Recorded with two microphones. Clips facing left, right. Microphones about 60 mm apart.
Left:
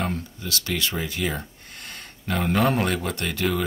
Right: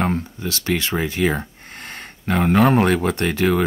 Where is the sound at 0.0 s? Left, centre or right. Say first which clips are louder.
Right 6 dB; right.